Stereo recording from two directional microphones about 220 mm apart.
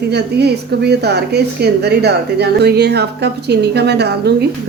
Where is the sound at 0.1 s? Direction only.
50° right (ahead or behind).